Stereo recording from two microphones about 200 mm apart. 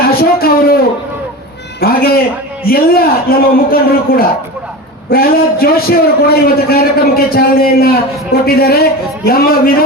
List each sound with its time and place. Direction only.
0.1 s a man's voice: 50° left (ahead or behind)